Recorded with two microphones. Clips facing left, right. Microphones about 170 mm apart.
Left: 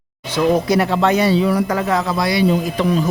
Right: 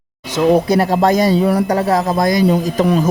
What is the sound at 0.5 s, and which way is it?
Speech, 35° right (ahead or behind).